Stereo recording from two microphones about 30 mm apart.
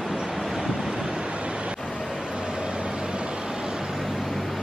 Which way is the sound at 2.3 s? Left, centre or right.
Right.